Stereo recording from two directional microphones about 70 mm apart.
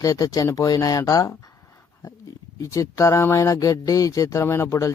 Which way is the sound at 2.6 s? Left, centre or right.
Left.